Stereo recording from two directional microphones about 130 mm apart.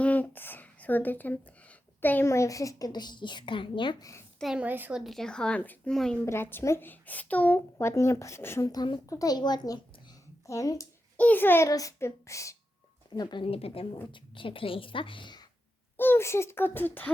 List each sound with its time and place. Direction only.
0.0 s a sound: 10° left (ahead or behind)
2.0 s a child's voice: 15° left (ahead or behind); by 3.9 s 40° left (ahead or behind)
4.4 s speech: 5° right (ahead or behind)
6.2 s speech: 20° left (ahead or behind)
7.8 s a woman's voice: 20° left (ahead or behind)
11.2 s a woman's voice: 15° left (ahead or behind)
13.1 s a child's voice: 40° left (ahead or behind)
16.0 s speech: 15° left (ahead or behind)